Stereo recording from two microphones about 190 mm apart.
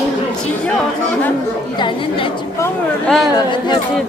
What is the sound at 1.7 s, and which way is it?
Speech, 25° left (ahead or behind).